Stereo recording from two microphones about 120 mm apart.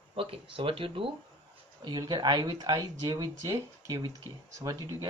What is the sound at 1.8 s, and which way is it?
Speech, 35° right (ahead or behind).